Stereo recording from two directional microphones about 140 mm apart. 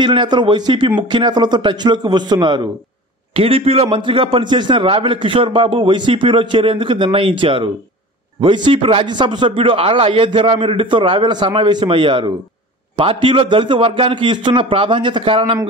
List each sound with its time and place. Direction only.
0.0 s a man's voice: 35° right (ahead or behind)
3.3 s a man's voice: 40° right (ahead or behind)